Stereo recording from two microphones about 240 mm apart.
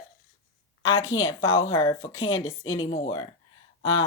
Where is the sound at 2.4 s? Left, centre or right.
Centre.